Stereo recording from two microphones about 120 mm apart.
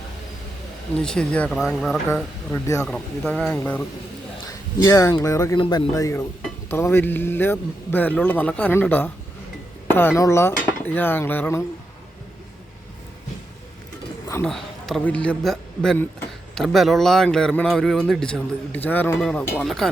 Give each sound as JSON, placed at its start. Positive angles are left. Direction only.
{"t": 0.9, "sound": "a man's voice", "side_deg": 5}
{"t": 1.5, "sound": "a man's voice", "side_deg": 0}
{"t": 5.5, "sound": "speech", "side_deg": 45}
{"t": 5.9, "sound": "speech", "side_deg": 30}
{"t": 6.7, "sound": "a man's voice", "side_deg": 20}
{"t": 14.4, "sound": "a man's voice", "side_deg": 0}